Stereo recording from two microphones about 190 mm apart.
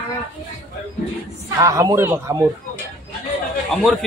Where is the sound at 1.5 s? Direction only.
15° right (ahead or behind).